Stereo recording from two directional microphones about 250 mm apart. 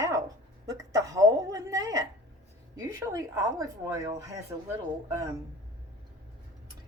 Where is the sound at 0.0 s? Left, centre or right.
Centre.